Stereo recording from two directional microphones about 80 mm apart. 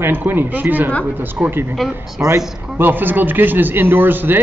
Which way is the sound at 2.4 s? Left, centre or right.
Centre.